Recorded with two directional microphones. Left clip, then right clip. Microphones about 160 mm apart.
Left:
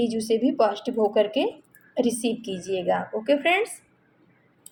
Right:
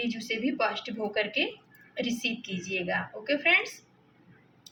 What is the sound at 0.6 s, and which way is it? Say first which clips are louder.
Speech: left 8 dB; 55° left (ahead or behind).